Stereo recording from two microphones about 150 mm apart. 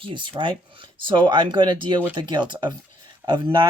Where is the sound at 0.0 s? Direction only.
35° right (ahead or behind).